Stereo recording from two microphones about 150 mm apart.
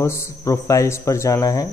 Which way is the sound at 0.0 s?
20° left (ahead or behind).